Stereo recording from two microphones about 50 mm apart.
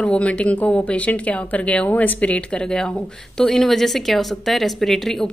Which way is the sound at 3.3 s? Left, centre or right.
Centre.